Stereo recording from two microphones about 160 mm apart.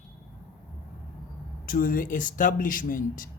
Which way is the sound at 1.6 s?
60° left (ahead or behind).